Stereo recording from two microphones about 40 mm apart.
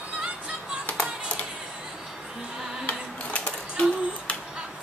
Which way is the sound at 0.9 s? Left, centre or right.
Left.